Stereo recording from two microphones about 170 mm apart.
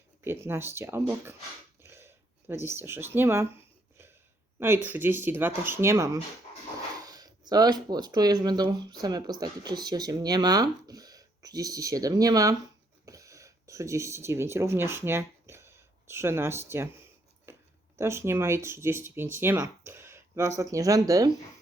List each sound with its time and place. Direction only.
0.3 s speech: 15° right (ahead or behind)
1.8 s a sound: 15° right (ahead or behind)
4.6 s speech: 10° right (ahead or behind)